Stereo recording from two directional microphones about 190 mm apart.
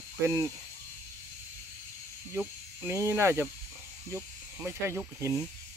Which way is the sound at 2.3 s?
10° right (ahead or behind).